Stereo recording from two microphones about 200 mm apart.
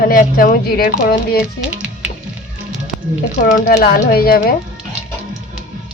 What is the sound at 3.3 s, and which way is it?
Speech, 45° left (ahead or behind).